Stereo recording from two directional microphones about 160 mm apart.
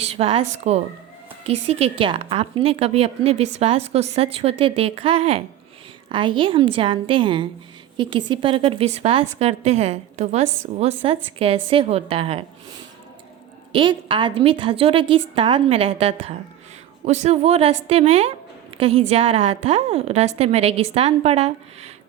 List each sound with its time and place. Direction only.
0.0 s a woman's voice: 40° right (ahead or behind)
13.7 s a woman's voice: 30° right (ahead or behind)